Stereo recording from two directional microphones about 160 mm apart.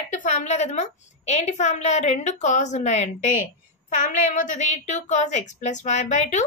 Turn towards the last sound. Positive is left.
turn(degrees=45)  # may be behind; listen again after turning